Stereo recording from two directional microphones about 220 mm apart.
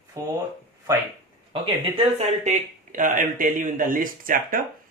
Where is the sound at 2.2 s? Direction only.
35° right (ahead or behind).